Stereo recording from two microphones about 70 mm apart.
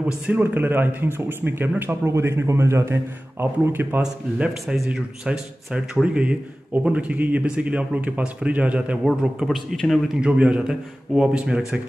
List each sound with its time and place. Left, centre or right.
0.0 s speech: right
2.1 s a man's voice: right
4.0 s speech: centre
9.8 s a man's voice: centre
10.2 s speech: centre